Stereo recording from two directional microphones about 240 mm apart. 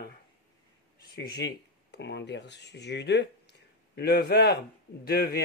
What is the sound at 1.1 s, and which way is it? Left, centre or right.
Speech, left.